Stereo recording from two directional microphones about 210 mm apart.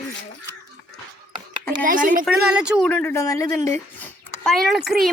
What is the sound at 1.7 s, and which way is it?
Speech, 40° right (ahead or behind).